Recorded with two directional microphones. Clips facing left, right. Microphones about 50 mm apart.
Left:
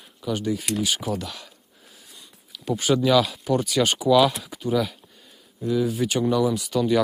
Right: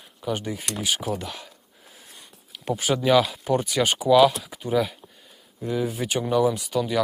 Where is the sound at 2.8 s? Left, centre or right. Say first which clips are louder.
Left 4 dB; centre.